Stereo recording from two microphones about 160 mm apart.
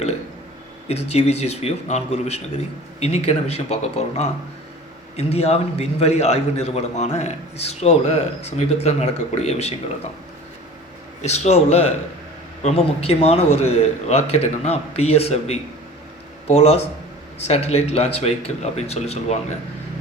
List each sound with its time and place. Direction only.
0.9 s a man's voice: 40° left (ahead or behind)
11.2 s a man's voice: 45° left (ahead or behind)